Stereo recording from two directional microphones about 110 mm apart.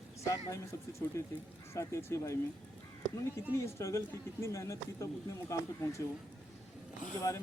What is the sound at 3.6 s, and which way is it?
Speech, 25° left (ahead or behind).